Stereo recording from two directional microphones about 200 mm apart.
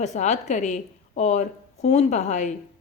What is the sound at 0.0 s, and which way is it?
A woman's voice, 35° left (ahead or behind).